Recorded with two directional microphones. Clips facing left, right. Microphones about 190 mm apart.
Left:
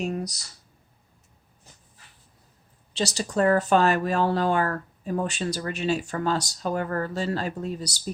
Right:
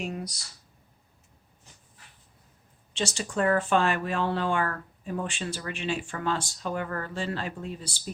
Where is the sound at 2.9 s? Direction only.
35° left (ahead or behind).